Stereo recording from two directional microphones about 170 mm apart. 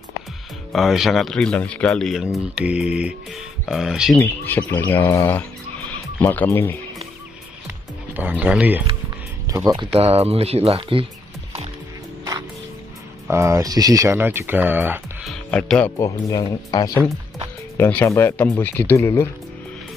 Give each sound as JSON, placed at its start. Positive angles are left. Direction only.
{"t": 0.7, "sound": "speech", "side_deg": 0}
{"t": 4.2, "sound": "speech", "side_deg": 10}
{"t": 7.6, "sound": "music", "side_deg": -10}
{"t": 9.5, "sound": "speech", "side_deg": -20}
{"t": 9.9, "sound": "speech", "side_deg": -35}
{"t": 13.3, "sound": "speech", "side_deg": -15}
{"t": 15.2, "sound": "speech", "side_deg": 5}